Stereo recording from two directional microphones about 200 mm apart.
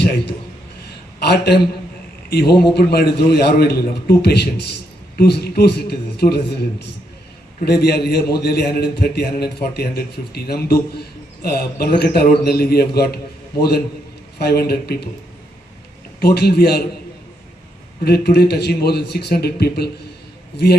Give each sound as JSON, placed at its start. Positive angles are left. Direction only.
{"t": 1.2, "sound": "a man's voice", "side_deg": 55}
{"t": 2.7, "sound": "a man's voice", "side_deg": 55}
{"t": 14.3, "sound": "a man's voice", "side_deg": 50}
{"t": 16.2, "sound": "a man's voice", "side_deg": 55}
{"t": 18.0, "sound": "a man's voice", "side_deg": 50}